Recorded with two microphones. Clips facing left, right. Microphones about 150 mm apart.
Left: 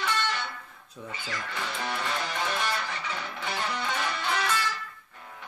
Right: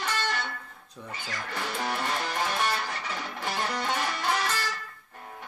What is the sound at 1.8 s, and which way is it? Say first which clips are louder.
Music: right 1 dB; 45° right (ahead or behind).